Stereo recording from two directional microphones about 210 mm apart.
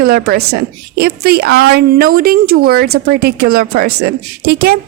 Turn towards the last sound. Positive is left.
turn(degrees=-50)  # may be behind; listen again after turning